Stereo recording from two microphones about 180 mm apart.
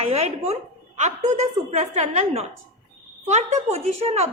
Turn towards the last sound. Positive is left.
turn(degrees=-35)  # may be behind; listen again after turning